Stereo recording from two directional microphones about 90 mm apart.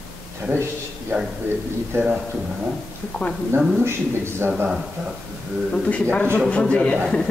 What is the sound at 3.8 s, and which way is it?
Speech, 25° right (ahead or behind).